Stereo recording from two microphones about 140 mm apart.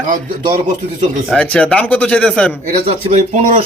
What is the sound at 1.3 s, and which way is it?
Speech, 5° left (ahead or behind).